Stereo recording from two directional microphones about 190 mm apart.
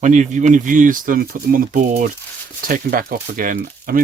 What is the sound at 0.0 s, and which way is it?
Speech, 40° right (ahead or behind).